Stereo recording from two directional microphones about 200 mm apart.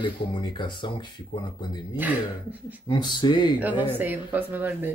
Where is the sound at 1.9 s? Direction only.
10° right (ahead or behind).